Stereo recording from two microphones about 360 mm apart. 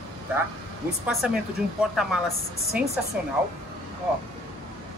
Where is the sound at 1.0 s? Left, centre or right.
Centre.